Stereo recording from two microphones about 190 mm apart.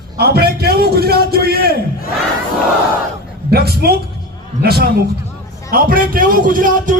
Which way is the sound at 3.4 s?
55° right (ahead or behind).